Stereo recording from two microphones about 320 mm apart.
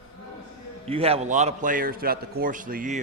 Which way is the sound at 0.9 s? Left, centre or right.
Centre.